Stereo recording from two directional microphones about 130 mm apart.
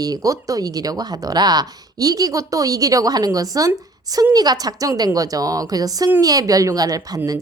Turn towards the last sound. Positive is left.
turn(degrees=-30)  # may be behind; listen again after turning